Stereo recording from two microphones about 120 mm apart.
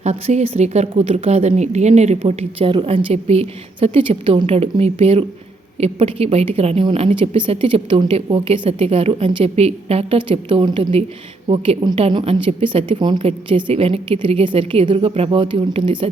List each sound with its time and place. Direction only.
0.0 s a woman's voice: 65° right (ahead or behind)
10.2 s a woman's voice: 50° right (ahead or behind)
11.9 s a woman's voice: 55° right (ahead or behind)